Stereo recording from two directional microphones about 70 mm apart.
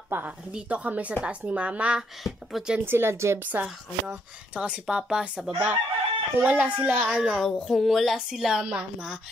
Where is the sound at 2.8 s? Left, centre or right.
Right.